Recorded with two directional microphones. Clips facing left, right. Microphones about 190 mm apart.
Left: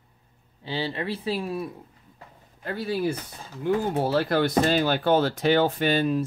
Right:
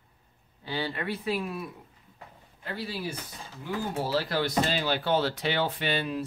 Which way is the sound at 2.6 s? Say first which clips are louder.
Left 8 dB; 50° left (ahead or behind).